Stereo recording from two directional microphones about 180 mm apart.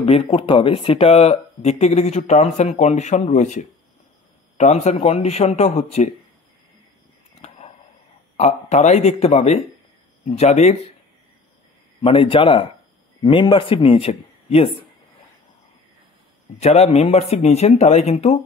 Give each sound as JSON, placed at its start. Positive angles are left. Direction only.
{"t": 0.0, "sound": "speech", "side_deg": 30}
{"t": 7.4, "sound": "a sound", "side_deg": 40}
{"t": 8.4, "sound": "speech", "side_deg": 35}
{"t": 12.0, "sound": "a man's voice", "side_deg": 30}
{"t": 16.6, "sound": "speech", "side_deg": 35}